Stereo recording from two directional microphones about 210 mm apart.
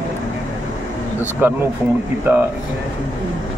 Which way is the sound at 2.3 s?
10° right (ahead or behind).